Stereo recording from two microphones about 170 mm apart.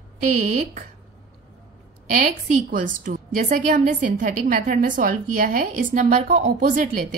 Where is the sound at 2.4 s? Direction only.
50° right (ahead or behind).